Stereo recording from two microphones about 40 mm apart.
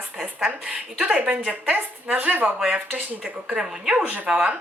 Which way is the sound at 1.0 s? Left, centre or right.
Right.